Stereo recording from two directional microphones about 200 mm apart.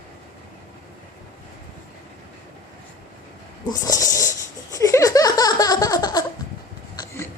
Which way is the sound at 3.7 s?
15° left (ahead or behind).